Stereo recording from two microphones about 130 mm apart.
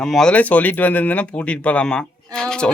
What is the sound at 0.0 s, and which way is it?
Speech, 5° left (ahead or behind).